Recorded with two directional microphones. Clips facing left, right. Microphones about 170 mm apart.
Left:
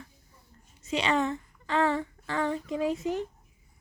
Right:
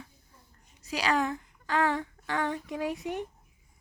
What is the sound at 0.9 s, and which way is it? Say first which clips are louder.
Speech: left 1 dB; centre (ahead or behind).